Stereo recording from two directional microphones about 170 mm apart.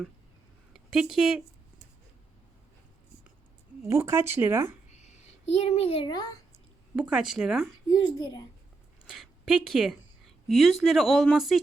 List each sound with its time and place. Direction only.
0.7 s speech: centre (ahead or behind)
3.8 s speech: 15° right (ahead or behind)
4.9 s a sound: 40° left (ahead or behind)
5.6 s a child's voice: 35° left (ahead or behind)
7.1 s speech: 5° right (ahead or behind)
7.9 s a child's voice: 25° left (ahead or behind)
9.0 s a woman's voice: centre (ahead or behind)